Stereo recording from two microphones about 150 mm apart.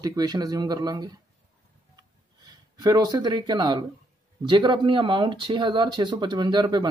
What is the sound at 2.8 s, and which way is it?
Speech, 30° right (ahead or behind).